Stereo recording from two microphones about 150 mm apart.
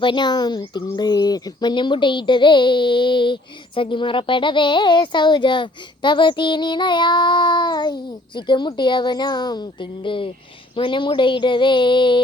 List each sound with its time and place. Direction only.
0.0 s speech: 30° left (ahead or behind)